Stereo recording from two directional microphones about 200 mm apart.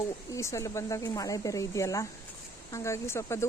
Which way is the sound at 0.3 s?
15° left (ahead or behind).